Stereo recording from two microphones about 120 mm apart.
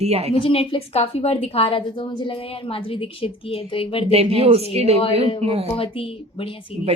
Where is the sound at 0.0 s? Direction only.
60° right (ahead or behind).